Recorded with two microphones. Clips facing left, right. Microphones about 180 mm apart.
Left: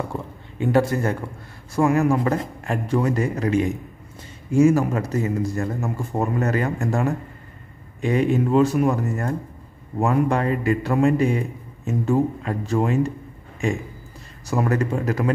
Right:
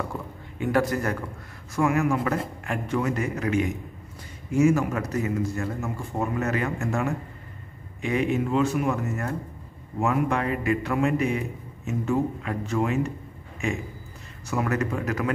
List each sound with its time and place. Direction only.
0.1 s a man's voice: 25° left (ahead or behind)
14.5 s a man's voice: 35° left (ahead or behind)